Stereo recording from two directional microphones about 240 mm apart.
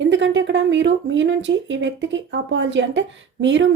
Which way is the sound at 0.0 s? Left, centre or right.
Right.